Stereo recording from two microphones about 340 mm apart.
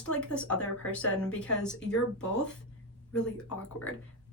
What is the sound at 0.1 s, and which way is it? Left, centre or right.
Speech, centre.